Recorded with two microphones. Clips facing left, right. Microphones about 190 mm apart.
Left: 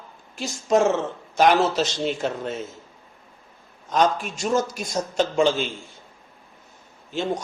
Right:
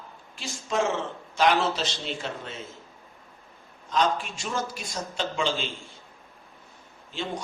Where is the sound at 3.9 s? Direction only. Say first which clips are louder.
Left 4 dB; 45° left (ahead or behind).